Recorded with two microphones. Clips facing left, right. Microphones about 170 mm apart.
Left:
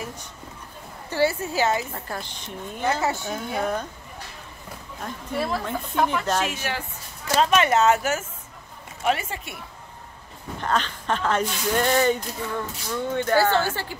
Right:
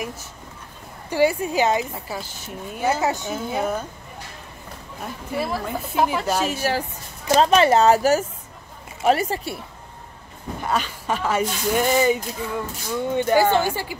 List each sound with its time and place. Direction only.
0.0 s a sound: 5° right (ahead or behind)
1.1 s speech: 15° right (ahead or behind)
2.0 s speech: 5° right (ahead or behind)
5.0 s speech: 10° right (ahead or behind)
6.4 s speech: 35° right (ahead or behind)
10.6 s speech: 10° right (ahead or behind)